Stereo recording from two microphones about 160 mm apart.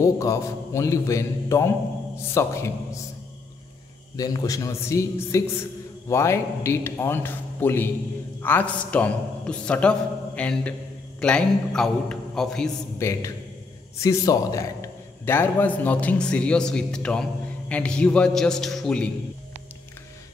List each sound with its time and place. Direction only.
0.0 s a man's voice: 20° left (ahead or behind)
4.2 s a man's voice: 20° left (ahead or behind); by 12.7 s 5° left (ahead or behind)
13.0 s a man's voice: 20° left (ahead or behind); by 19.0 s 5° left (ahead or behind)